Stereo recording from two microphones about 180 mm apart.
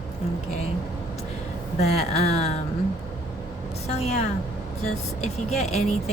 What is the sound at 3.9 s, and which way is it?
Speech, 35° left (ahead or behind).